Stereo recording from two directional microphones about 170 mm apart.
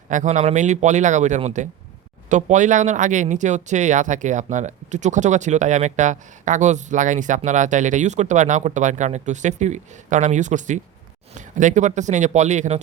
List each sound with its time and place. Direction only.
0.1 s speech: 45° right (ahead or behind)